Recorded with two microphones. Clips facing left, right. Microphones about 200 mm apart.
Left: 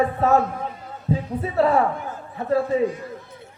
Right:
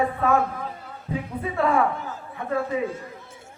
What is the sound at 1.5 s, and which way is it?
Speech, 35° left (ahead or behind).